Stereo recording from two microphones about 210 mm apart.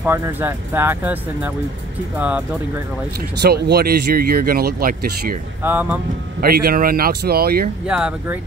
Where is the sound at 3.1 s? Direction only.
50° right (ahead or behind).